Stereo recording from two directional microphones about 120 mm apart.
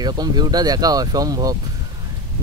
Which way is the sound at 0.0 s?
35° right (ahead or behind).